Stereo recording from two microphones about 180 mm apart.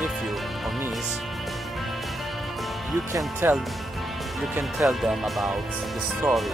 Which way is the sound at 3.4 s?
10° right (ahead or behind).